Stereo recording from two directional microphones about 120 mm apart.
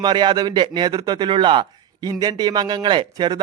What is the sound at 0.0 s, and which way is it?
Speech, 40° right (ahead or behind).